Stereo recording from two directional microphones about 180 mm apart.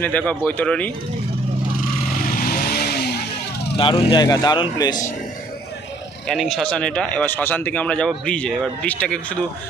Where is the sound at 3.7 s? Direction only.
30° left (ahead or behind).